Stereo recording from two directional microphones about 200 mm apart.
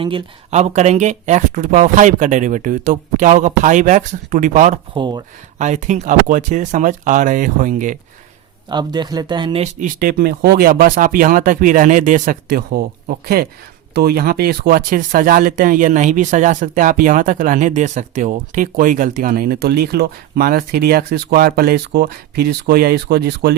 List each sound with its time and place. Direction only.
0.0 s speech: 25° right (ahead or behind)
4.9 s speech: 20° right (ahead or behind)
5.5 s speech: 35° right (ahead or behind)
8.7 s speech: 20° right (ahead or behind)
9.8 s speech: 50° right (ahead or behind)